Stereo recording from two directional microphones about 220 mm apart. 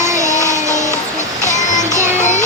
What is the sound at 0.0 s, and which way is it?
Music, 15° right (ahead or behind).